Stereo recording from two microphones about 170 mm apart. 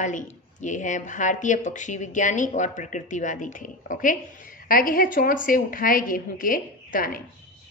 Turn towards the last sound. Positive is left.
turn(degrees=55)  # may be behind; listen again after turning